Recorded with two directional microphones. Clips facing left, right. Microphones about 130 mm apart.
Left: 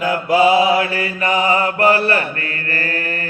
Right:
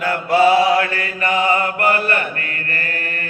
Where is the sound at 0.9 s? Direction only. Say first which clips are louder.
Left 1 dB; 30° left (ahead or behind).